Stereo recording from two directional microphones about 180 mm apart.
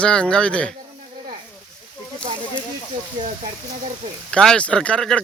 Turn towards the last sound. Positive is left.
turn(degrees=5)  # may be behind; listen again after turning